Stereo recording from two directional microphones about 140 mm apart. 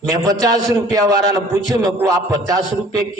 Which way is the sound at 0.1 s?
25° right (ahead or behind).